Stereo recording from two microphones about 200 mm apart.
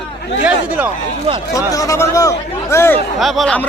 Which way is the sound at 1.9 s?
15° left (ahead or behind).